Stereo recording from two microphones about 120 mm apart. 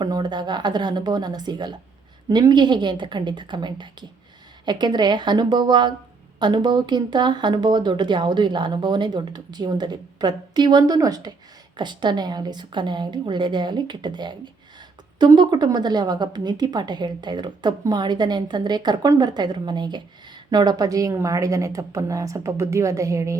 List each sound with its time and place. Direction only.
0.0 s a woman's voice: 35° right (ahead or behind)